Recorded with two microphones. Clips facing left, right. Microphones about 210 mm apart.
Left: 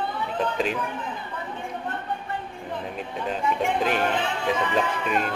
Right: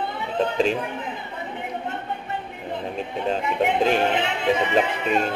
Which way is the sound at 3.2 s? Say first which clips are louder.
Right 3 dB; 20° right (ahead or behind).